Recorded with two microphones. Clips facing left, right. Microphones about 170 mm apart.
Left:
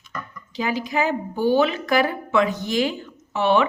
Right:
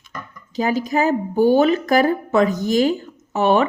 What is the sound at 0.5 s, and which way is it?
Speech, 45° right (ahead or behind).